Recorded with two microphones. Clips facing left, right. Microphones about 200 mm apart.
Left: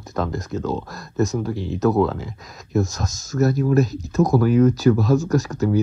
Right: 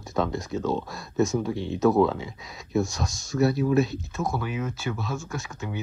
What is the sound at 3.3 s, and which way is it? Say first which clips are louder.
Speech: left 3 dB; 45° left (ahead or behind).